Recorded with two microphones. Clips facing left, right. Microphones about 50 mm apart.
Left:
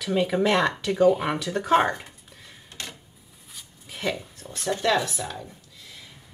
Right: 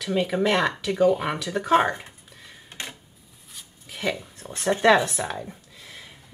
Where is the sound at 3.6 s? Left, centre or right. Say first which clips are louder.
Right 1 dB; centre.